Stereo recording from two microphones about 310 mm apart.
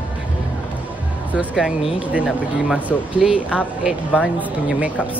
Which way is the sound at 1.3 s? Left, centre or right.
Centre.